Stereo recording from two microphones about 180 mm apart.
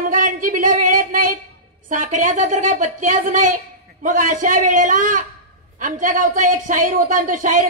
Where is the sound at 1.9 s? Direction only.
45° right (ahead or behind).